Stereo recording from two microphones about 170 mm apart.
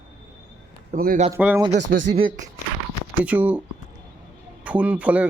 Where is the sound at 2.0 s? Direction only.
55° right (ahead or behind).